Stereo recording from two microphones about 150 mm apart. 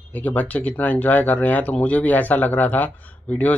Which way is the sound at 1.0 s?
10° left (ahead or behind).